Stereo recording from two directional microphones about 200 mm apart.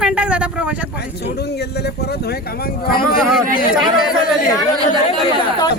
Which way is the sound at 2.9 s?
45° left (ahead or behind).